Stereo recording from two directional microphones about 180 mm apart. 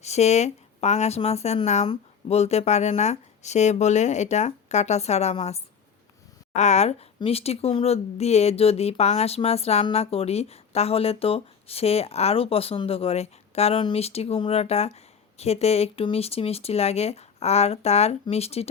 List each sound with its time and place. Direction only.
0.0 s speech: 40° left (ahead or behind)